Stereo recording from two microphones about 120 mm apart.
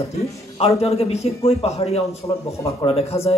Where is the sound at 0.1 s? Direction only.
60° left (ahead or behind).